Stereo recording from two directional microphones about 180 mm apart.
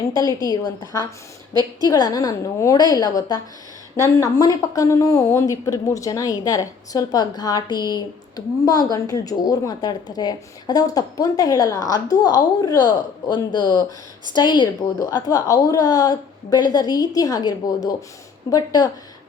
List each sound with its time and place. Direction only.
0.1 s speech: 20° left (ahead or behind)